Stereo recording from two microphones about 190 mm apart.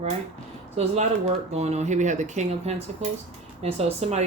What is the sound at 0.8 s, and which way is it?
Speech, 35° right (ahead or behind).